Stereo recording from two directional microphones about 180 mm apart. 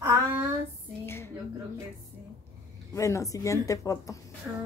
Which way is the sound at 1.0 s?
15° left (ahead or behind).